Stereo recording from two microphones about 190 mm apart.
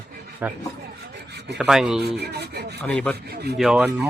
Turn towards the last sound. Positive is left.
turn(degrees=-5)  # may be behind; listen again after turning